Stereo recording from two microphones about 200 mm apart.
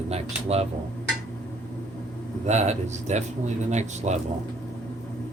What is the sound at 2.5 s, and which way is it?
Speech, 35° right (ahead or behind).